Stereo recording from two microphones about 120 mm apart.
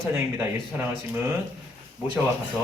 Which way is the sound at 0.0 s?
20° right (ahead or behind).